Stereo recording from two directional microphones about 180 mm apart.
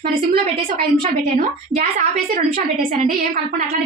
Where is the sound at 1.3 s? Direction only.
45° right (ahead or behind).